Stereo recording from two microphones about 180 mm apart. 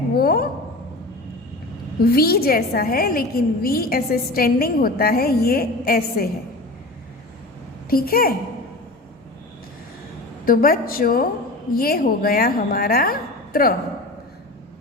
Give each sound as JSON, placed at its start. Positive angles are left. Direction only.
{"t": 0.1, "sound": "a woman's voice", "side_deg": 55}
{"t": 2.1, "sound": "a woman's voice", "side_deg": 60}
{"t": 7.9, "sound": "a woman's voice", "side_deg": 55}
{"t": 10.4, "sound": "a woman's voice", "side_deg": 50}